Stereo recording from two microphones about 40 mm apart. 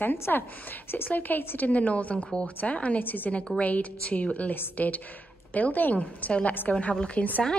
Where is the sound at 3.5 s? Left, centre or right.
Left.